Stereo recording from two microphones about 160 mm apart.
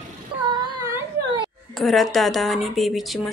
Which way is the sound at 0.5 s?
25° right (ahead or behind).